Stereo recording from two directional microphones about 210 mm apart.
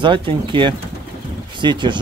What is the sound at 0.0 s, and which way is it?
Speech, 25° right (ahead or behind).